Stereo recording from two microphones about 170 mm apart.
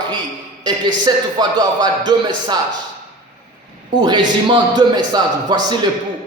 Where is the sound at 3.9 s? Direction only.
25° right (ahead or behind).